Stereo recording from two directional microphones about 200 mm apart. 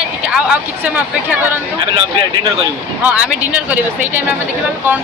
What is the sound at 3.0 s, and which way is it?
Speech, 5° right (ahead or behind).